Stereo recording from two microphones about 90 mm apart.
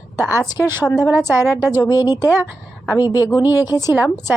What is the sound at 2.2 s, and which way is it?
Speech, 20° right (ahead or behind).